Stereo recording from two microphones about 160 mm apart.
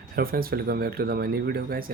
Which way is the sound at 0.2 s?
65° right (ahead or behind).